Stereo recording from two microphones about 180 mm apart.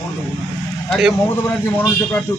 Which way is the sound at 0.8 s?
5° right (ahead or behind).